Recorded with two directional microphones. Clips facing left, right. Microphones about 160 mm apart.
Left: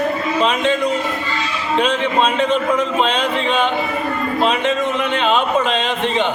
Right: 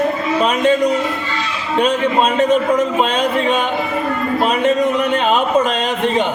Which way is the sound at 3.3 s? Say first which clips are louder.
Right 3 dB; 45° right (ahead or behind).